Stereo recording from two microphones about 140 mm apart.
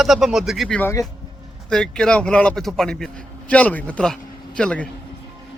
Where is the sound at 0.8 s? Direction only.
20° left (ahead or behind).